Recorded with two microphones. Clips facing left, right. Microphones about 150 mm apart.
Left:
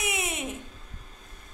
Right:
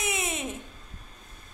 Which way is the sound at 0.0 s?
15° left (ahead or behind).